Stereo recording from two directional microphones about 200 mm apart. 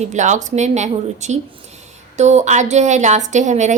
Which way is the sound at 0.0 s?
35° right (ahead or behind).